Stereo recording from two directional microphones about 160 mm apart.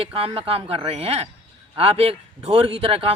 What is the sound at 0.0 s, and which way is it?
Speech, 35° right (ahead or behind).